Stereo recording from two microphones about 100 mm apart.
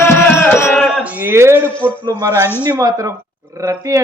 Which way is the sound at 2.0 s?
45° right (ahead or behind).